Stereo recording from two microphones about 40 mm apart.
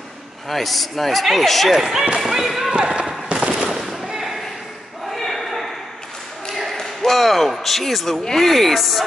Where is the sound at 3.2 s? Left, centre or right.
Right.